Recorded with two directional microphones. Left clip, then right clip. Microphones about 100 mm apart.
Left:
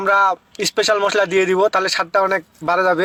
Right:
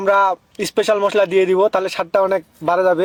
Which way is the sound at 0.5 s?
30° right (ahead or behind).